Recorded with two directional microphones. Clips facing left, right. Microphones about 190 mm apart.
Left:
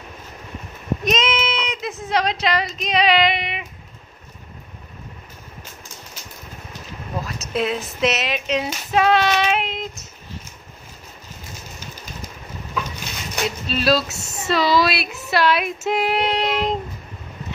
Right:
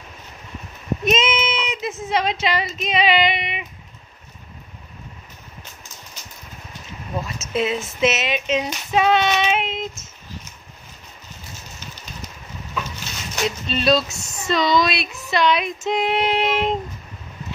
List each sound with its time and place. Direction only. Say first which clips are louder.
1.0 s speech: right 2 dB; 5° right (ahead or behind)
7.2 s female singing: even; centre (ahead or behind)
13.7 s child singing: even; 5° left (ahead or behind)
14.1 s speech: left 2 dB; 25° left (ahead or behind)
14.5 s child singing: left 1 dB; 5° left (ahead or behind)